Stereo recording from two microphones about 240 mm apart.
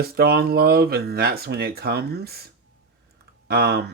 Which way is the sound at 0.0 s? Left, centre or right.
Right.